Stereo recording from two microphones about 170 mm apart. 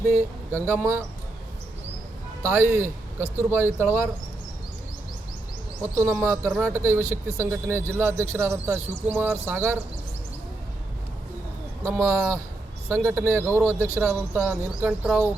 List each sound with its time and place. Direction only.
0.5 s speech: 10° right (ahead or behind)
2.4 s speech: 15° right (ahead or behind)
6.0 s speech: 15° right (ahead or behind)
11.8 s speech: 15° right (ahead or behind)